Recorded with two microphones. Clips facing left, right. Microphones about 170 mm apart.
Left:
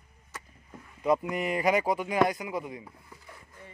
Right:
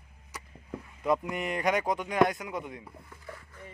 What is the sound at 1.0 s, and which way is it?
Speech, centre (ahead or behind).